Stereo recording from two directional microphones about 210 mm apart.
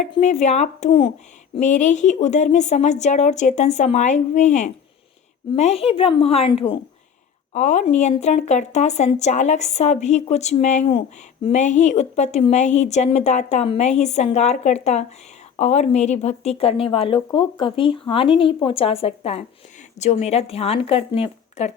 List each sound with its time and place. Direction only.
0.2 s a woman's voice: 30° left (ahead or behind)